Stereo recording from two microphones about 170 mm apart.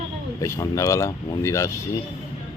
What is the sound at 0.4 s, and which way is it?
Speech, 15° left (ahead or behind).